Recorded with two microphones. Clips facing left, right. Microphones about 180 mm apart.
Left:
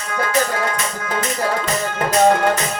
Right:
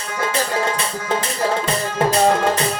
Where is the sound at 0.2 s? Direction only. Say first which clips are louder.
Left 1 dB; 30° right (ahead or behind).